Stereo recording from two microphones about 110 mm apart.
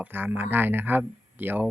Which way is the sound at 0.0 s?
15° right (ahead or behind).